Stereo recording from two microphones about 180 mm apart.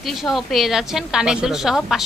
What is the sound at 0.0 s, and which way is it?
A woman's voice, centre (ahead or behind).